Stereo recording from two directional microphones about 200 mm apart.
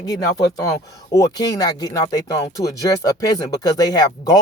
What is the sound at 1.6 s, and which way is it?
Speech, 20° left (ahead or behind).